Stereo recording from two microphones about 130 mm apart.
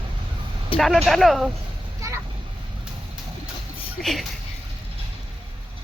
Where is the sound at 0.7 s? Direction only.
45° left (ahead or behind).